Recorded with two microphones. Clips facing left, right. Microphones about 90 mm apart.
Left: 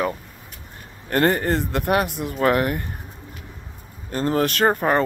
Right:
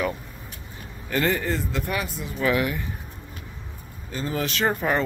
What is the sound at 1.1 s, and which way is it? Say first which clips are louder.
Speech: left 5 dB; 55° left (ahead or behind).